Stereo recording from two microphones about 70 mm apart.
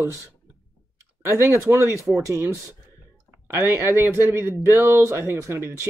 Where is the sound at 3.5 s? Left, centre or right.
Right.